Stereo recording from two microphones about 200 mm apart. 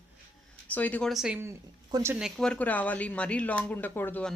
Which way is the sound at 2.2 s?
5° left (ahead or behind).